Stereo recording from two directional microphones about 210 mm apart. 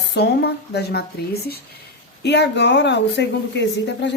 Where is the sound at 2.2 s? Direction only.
55° left (ahead or behind).